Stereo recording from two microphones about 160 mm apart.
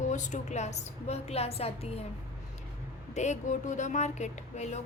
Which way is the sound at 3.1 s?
45° left (ahead or behind).